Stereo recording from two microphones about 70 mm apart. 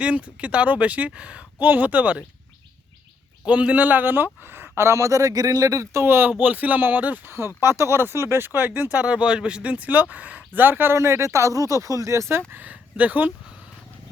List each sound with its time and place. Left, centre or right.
0.0 s speech: centre
3.4 s speech: centre; by 6.3 s right
6.4 s speech: right
7.3 s speech: right
12.5 s speech: right